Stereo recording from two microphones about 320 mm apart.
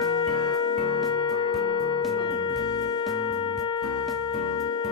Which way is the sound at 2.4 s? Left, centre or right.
Centre.